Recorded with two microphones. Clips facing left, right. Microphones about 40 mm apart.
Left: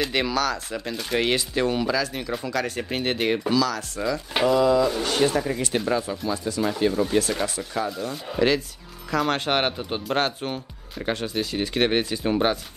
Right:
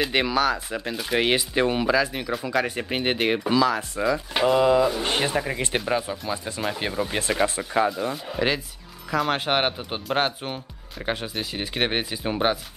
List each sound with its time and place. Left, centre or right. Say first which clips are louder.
0.0 s speech: right 2 dB; centre
8.3 s speech: left 7 dB; centre